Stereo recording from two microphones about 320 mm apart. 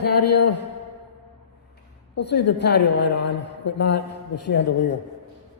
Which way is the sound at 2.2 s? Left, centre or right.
Left.